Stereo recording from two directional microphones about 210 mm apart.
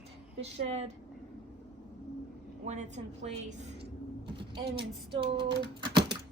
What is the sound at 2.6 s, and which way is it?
A woman's voice, 35° right (ahead or behind).